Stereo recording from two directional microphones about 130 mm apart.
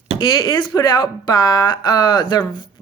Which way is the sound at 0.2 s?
35° left (ahead or behind).